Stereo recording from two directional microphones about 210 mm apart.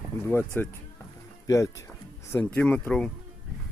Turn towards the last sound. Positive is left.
turn(degrees=5)  # may be behind; listen again after turning